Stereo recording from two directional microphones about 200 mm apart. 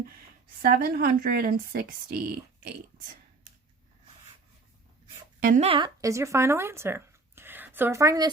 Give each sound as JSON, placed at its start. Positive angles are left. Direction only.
{"t": 0.6, "sound": "speech", "side_deg": -50}
{"t": 5.4, "sound": "speech", "side_deg": -35}